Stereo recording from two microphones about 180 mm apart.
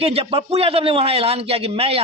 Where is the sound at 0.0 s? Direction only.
30° right (ahead or behind).